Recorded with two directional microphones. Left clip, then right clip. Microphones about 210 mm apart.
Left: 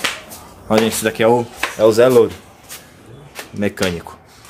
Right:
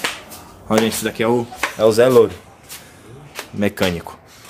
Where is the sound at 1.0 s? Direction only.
20° left (ahead or behind).